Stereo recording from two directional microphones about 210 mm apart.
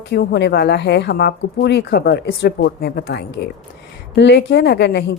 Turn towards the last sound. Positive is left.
turn(degrees=55)  # may be behind; listen again after turning